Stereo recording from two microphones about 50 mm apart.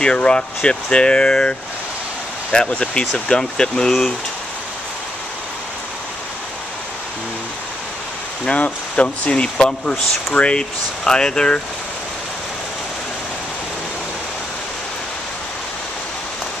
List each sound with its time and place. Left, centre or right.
0.0 s speech: centre
2.7 s speech: centre
8.5 s speech: left